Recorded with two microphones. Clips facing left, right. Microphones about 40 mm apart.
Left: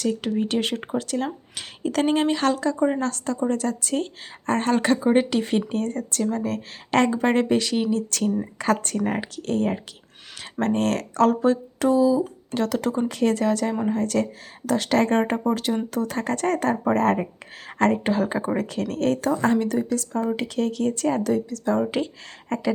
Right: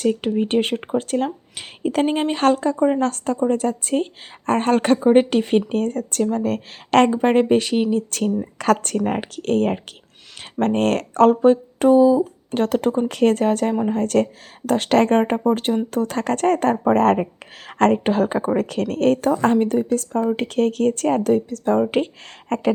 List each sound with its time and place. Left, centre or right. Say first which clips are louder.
0.0 s speech: right 4 dB; right
1.5 s speech: right 3 dB; right
2.3 s speech: right 4 dB; right
2.7 s a woman's voice: right 4 dB; centre
3.0 s speech: right 5 dB; right
7.1 s speech: right 4 dB; right
8.5 s speech: right 4 dB; right
13.1 s speech: right 4 dB; right